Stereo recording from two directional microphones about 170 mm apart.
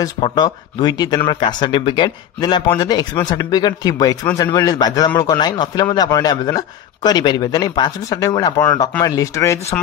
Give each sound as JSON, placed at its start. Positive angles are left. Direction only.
{"t": 0.0, "sound": "speech", "side_deg": 25}